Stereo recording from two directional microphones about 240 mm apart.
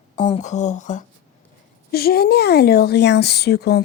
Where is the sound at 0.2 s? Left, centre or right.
Left.